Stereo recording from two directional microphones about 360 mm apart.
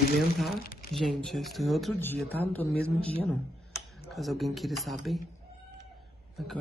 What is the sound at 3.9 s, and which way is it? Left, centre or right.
Speech, centre.